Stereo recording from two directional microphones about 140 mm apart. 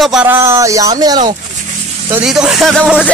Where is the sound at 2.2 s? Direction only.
5° right (ahead or behind).